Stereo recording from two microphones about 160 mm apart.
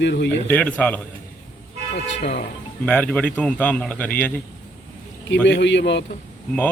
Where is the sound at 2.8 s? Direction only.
10° left (ahead or behind).